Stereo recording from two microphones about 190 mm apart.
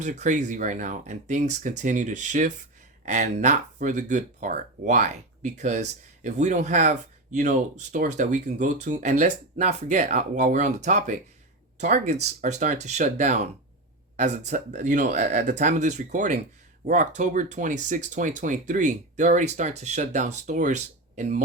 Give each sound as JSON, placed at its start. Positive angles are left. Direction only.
{"t": 0.0, "sound": "speech", "side_deg": -40}